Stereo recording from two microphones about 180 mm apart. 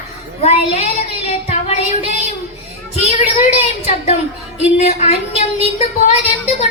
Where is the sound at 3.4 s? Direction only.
40° left (ahead or behind).